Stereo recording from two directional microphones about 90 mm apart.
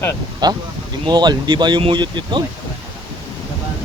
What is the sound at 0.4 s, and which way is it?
Speech, 50° right (ahead or behind).